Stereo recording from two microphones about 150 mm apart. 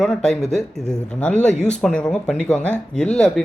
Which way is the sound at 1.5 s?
50° left (ahead or behind).